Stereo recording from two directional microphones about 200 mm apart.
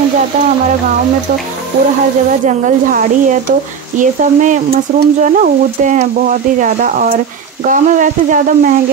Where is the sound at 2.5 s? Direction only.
40° right (ahead or behind).